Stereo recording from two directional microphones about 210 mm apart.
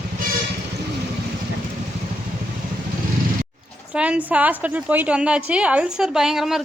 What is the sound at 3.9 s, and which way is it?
A woman's voice, 5° right (ahead or behind).